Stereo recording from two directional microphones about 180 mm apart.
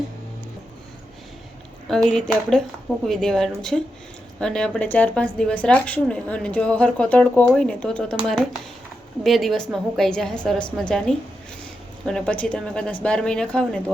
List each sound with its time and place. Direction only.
2.1 s a woman's voice: 5° left (ahead or behind)
9.2 s a woman's voice: centre (ahead or behind)